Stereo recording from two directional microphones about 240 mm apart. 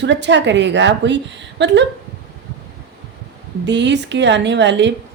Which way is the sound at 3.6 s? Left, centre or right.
Right.